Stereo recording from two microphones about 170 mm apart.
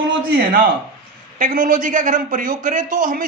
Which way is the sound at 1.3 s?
50° right (ahead or behind).